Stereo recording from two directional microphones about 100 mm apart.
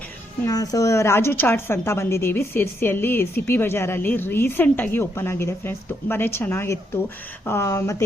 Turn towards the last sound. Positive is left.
turn(degrees=30)  # may be behind; listen again after turning